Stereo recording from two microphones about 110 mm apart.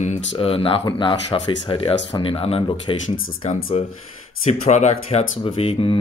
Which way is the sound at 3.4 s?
90° left.